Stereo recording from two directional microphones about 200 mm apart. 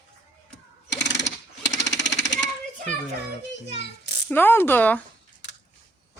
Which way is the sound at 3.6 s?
60° left (ahead or behind).